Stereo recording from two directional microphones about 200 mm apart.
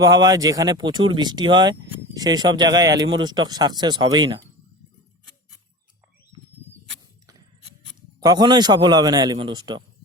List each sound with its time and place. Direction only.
0.0 s speech: 20° right (ahead or behind)
6.3 s a sound: 20° right (ahead or behind)
8.2 s speech: 20° right (ahead or behind)